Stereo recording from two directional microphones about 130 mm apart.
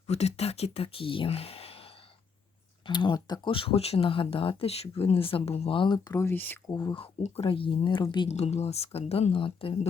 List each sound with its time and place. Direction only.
0.1 s speech: 55° left (ahead or behind)
2.8 s speech: 35° left (ahead or behind)
6.1 s speech: 20° left (ahead or behind)
6.7 s speech: 30° left (ahead or behind)
7.2 s speech: 45° left (ahead or behind)
8.3 s speech: 55° left (ahead or behind)